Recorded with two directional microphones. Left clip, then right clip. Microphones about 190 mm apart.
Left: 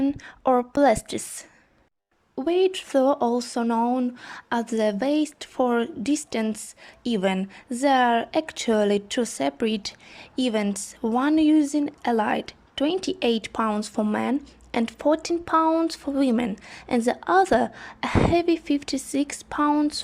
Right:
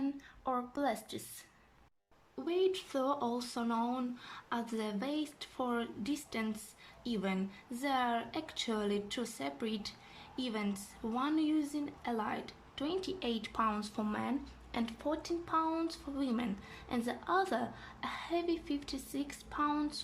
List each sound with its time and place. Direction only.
0.0 s speech: 40° left (ahead or behind)